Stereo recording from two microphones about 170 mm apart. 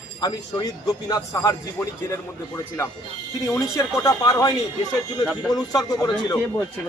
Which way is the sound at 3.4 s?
15° left (ahead or behind).